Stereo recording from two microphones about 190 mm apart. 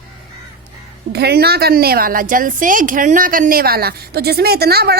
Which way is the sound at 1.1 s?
60° right (ahead or behind).